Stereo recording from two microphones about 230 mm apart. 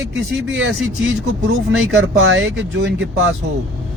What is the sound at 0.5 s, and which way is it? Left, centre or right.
Speech, right.